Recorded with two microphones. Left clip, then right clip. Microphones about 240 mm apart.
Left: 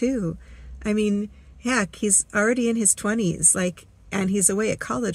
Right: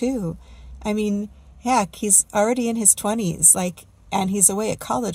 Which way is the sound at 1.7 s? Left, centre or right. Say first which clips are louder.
Right 3 dB; right.